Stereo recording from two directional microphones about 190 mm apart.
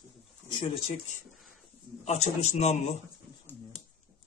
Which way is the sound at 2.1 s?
35° left (ahead or behind).